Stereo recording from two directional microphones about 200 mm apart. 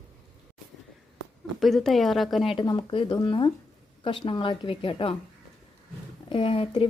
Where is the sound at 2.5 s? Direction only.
25° left (ahead or behind).